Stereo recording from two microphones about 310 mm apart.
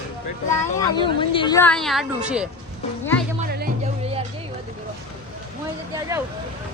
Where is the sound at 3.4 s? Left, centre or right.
Right.